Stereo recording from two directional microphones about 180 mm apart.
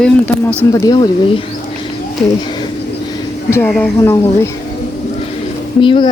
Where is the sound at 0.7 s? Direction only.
20° left (ahead or behind).